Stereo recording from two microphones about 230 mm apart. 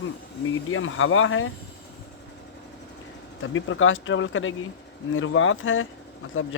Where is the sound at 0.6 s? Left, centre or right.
Left.